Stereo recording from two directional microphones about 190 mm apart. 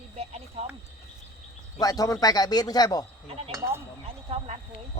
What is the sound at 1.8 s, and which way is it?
Speech, 20° left (ahead or behind).